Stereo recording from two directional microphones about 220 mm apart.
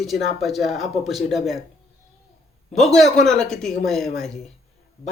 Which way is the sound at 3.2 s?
Centre (ahead or behind).